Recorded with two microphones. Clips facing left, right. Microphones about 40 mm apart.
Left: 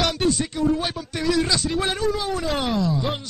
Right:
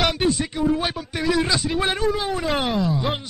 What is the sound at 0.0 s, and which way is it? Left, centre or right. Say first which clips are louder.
A man's voice: right 1 dB; centre.